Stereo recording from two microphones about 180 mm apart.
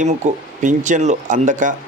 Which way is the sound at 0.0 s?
45° right (ahead or behind).